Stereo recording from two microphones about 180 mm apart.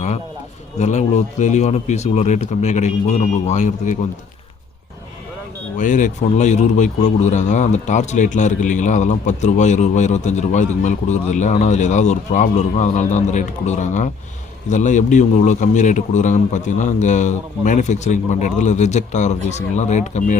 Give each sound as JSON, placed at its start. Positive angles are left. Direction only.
{"t": 0.8, "sound": "speech", "side_deg": 40}
{"t": 5.7, "sound": "speech", "side_deg": 45}